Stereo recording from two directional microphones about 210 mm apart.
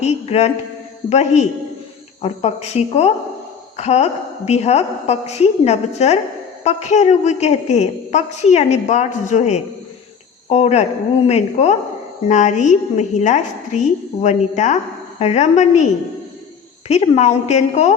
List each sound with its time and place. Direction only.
0.0 s a woman's voice: 30° left (ahead or behind)
16.9 s a woman's voice: 30° left (ahead or behind)